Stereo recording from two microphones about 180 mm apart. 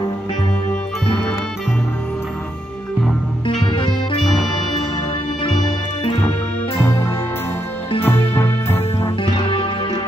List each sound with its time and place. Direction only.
3.7 s music: 30° left (ahead or behind)
8.0 s music: 10° left (ahead or behind)
9.2 s music: 30° left (ahead or behind)